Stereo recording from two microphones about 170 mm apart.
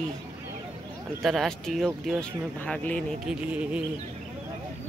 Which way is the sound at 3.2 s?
5° right (ahead or behind).